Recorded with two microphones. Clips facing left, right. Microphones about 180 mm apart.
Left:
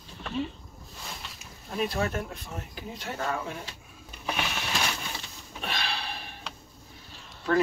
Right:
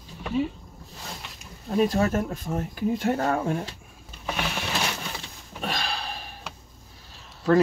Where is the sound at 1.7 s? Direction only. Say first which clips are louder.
Right 7 dB; 45° right (ahead or behind).